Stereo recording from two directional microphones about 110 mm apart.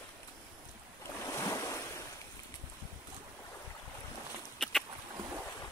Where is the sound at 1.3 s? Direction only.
25° left (ahead or behind).